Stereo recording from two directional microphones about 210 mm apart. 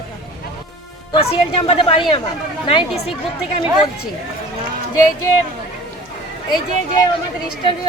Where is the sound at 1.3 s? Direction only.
25° left (ahead or behind).